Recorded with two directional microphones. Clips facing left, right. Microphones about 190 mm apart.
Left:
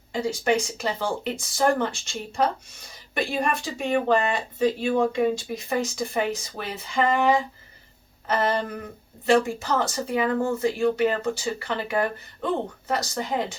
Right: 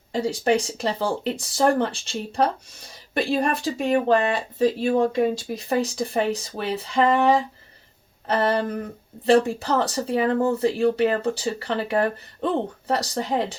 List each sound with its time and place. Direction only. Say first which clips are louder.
0.1 s speech: right 2 dB; 35° right (ahead or behind)
8.3 s speech: right 3 dB; 30° right (ahead or behind)